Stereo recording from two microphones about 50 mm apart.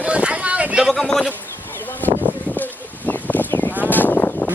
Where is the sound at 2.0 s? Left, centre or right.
Left.